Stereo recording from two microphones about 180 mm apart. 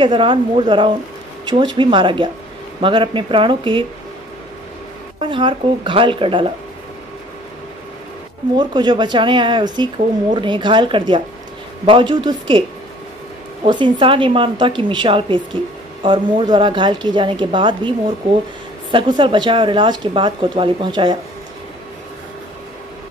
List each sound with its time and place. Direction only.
0.0 s speech: 30° right (ahead or behind)
5.2 s speech: 30° right (ahead or behind)
8.5 s speech: 25° right (ahead or behind)
13.7 s speech: 25° right (ahead or behind)